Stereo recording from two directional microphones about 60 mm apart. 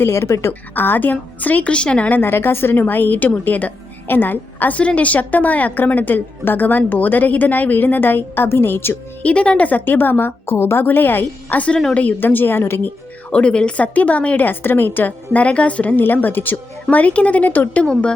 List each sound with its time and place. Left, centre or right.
0.0 s a woman's voice: left
0.7 s a woman's voice: left
4.8 s a woman's voice: left
9.2 s a woman's voice: centre; by 12.9 s left
13.3 s a woman's voice: centre
16.9 s a woman's voice: left